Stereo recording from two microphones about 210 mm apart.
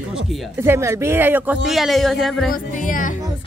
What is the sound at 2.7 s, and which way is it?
Speech, 40° left (ahead or behind).